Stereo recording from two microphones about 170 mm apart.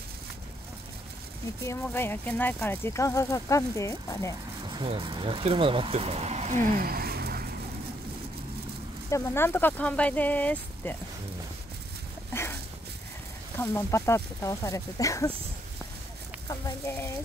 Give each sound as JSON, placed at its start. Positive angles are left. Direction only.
{"t": 1.6, "sound": "speech", "side_deg": 15}
{"t": 4.6, "sound": "speech", "side_deg": -30}
{"t": 9.1, "sound": "speech", "side_deg": 15}
{"t": 12.3, "sound": "dog", "side_deg": 15}
{"t": 13.6, "sound": "speech", "side_deg": 15}
{"t": 16.4, "sound": "speech", "side_deg": 20}